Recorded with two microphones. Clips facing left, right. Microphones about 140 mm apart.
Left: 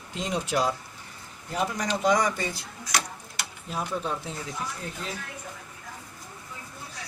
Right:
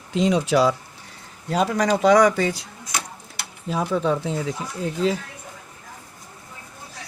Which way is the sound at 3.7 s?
90° right.